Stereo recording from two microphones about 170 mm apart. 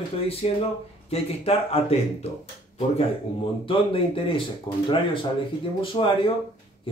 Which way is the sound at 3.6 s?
30° left (ahead or behind).